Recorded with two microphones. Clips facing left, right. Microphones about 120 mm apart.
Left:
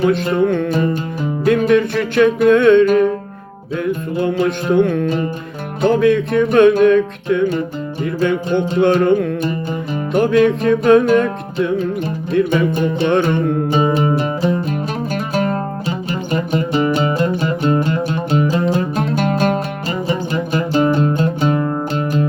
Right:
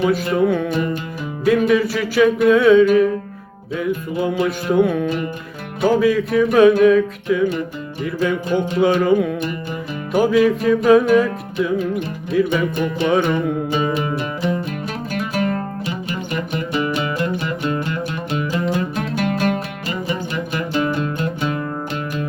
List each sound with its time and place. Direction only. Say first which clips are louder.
0.3 s music: left 2 dB; 5° right (ahead or behind)
12.3 s music: left 2 dB; centre (ahead or behind)
13.7 s music: left 5 dB; 35° left (ahead or behind)